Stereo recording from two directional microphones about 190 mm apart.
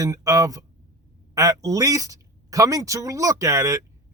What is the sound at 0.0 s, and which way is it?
A man's voice, 20° right (ahead or behind).